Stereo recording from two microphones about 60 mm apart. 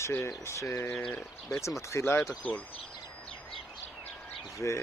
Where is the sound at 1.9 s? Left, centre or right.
Left.